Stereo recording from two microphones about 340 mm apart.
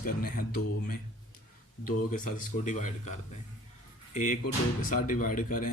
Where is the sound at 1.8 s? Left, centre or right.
Left.